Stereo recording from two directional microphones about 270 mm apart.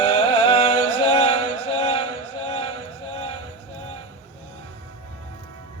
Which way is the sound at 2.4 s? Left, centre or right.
Centre.